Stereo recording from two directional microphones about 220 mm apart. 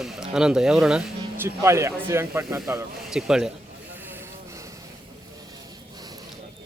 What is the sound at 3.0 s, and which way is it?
Speech, centre (ahead or behind).